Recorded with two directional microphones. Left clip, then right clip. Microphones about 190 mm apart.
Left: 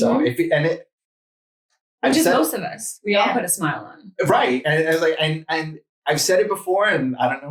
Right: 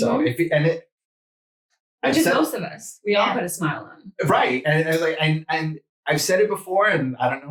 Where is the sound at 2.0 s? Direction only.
45° left (ahead or behind).